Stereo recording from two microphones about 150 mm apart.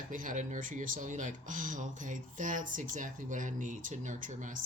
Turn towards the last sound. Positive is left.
turn(degrees=-60)  # may be behind; listen again after turning